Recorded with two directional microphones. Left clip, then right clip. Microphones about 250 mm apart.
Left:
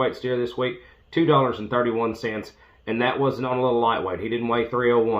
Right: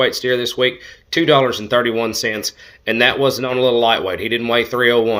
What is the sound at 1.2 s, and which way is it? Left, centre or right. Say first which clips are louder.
Speech: right 6 dB; centre.